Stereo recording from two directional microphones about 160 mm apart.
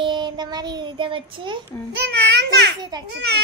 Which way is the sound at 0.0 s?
30° right (ahead or behind).